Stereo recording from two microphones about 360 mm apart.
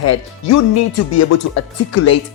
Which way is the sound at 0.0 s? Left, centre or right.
Left.